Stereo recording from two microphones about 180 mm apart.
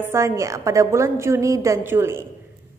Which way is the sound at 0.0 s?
15° right (ahead or behind).